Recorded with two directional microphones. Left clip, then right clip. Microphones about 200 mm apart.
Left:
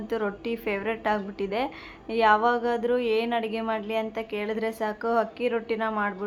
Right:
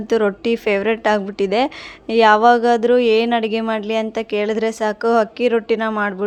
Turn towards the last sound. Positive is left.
turn(degrees=-40)  # may be behind; listen again after turning